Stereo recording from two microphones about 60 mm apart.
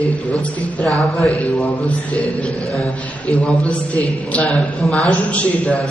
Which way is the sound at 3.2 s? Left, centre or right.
Left.